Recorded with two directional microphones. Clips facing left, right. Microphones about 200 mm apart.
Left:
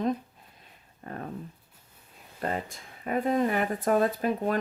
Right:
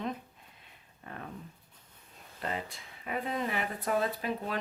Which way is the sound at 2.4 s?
45° left (ahead or behind).